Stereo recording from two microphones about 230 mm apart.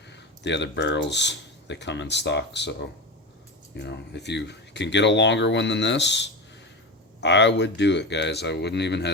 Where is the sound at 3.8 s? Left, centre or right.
Left.